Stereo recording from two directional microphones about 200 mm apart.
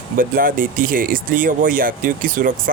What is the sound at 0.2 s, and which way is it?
Speech, 45° right (ahead or behind).